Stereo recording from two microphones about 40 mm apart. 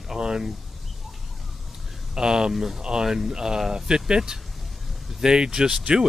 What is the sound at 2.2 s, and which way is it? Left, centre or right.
Speech, centre.